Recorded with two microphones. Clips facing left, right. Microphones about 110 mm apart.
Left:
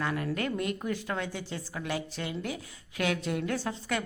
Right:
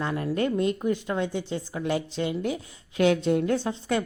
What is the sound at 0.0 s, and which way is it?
Speech, 30° right (ahead or behind).